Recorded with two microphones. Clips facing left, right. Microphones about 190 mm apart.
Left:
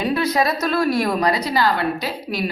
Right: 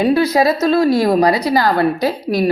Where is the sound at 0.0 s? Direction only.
30° right (ahead or behind).